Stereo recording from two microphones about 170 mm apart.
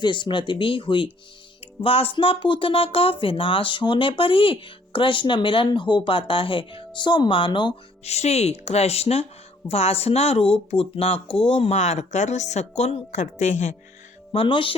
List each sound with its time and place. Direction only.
0.0 s speech: 25° left (ahead or behind); by 13.7 s 45° left (ahead or behind)
14.3 s speech: 30° left (ahead or behind)